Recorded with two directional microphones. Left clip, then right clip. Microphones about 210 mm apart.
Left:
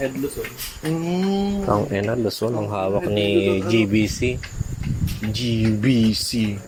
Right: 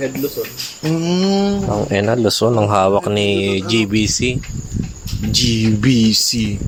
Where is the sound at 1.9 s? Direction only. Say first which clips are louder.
Right 7 dB; 30° right (ahead or behind).